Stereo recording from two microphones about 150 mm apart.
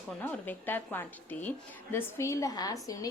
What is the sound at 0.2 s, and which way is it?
A woman's voice, 10° left (ahead or behind).